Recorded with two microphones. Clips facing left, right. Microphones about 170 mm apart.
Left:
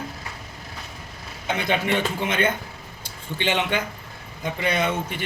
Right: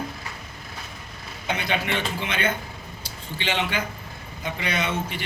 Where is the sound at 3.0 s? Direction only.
50° left (ahead or behind).